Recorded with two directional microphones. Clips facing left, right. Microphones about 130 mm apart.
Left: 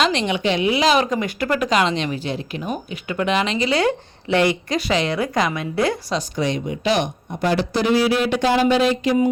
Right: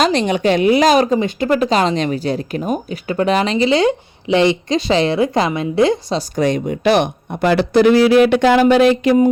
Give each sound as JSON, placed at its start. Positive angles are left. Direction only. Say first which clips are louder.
{"t": 0.0, "sound": "speech", "louder": "right 5 dB", "side_deg": -40}
{"t": 1.1, "sound": "speech", "louder": "right 6 dB", "side_deg": -25}
{"t": 6.3, "sound": "speech", "louder": "right 8 dB", "side_deg": -50}